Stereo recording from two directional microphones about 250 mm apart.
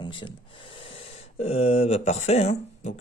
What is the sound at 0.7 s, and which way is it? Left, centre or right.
Speech, left.